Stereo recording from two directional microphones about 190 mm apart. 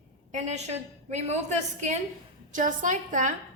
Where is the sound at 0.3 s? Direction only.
35° right (ahead or behind).